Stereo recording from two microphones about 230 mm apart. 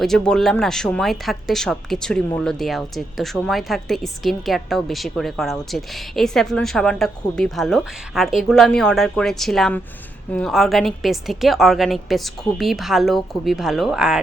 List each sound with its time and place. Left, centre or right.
0.0 s speech: centre